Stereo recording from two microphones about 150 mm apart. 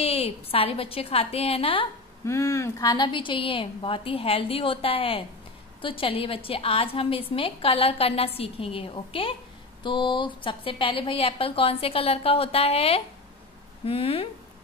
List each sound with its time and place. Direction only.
0.0 s a woman's voice: 40° left (ahead or behind)
2.2 s a woman's voice: 20° left (ahead or behind); by 14.3 s 40° left (ahead or behind)